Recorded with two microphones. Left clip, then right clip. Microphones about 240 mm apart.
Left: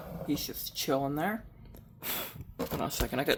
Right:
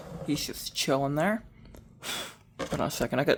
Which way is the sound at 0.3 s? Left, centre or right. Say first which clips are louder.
Right 3 dB; right.